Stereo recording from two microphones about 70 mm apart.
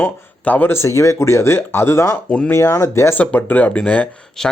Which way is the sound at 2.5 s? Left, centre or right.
Left.